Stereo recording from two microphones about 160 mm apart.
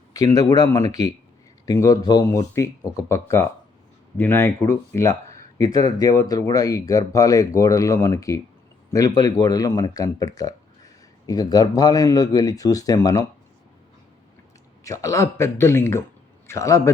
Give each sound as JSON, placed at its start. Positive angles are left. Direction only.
{"t": 0.1, "sound": "a man's voice", "side_deg": 25}
{"t": 14.8, "sound": "a man's voice", "side_deg": 20}